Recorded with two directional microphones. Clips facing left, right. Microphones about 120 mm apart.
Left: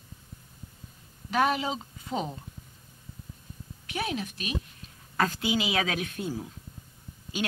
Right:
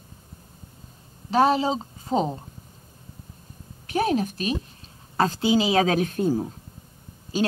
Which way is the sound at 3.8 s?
40° right (ahead or behind).